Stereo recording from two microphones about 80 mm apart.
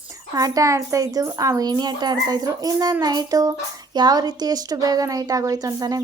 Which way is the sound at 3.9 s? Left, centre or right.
Right.